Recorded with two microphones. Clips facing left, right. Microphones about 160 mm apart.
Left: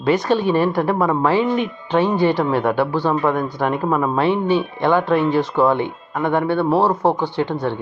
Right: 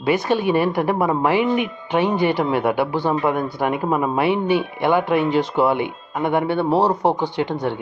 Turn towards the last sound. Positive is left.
turn(degrees=-15)  # may be behind; listen again after turning